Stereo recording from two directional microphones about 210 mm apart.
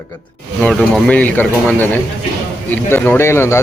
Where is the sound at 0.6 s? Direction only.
5° left (ahead or behind).